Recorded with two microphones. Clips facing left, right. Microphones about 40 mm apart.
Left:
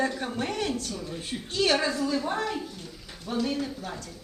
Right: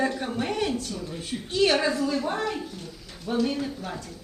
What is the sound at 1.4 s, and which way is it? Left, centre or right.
Speech, centre.